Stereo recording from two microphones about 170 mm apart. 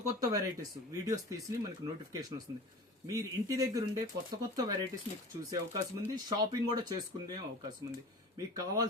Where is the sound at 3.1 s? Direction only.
20° right (ahead or behind).